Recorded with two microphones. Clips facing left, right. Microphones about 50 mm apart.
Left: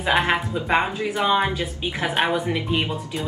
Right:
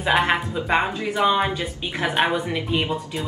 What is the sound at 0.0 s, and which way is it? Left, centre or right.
A woman's voice, centre.